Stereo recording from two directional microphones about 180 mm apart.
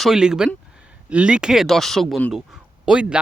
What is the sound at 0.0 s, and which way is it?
Speech, 5° right (ahead or behind).